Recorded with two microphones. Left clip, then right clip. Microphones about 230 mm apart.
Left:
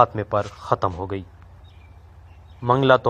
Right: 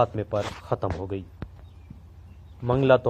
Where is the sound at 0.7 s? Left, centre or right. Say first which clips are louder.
Left 10 dB; left.